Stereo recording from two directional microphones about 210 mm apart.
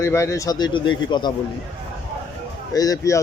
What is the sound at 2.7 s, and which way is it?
Speech, 15° left (ahead or behind).